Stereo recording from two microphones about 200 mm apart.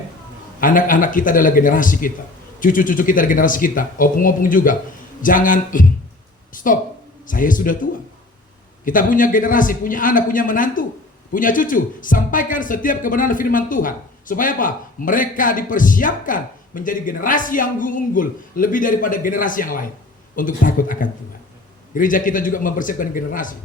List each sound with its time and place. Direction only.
0.6 s a woman's voice: 40° left (ahead or behind)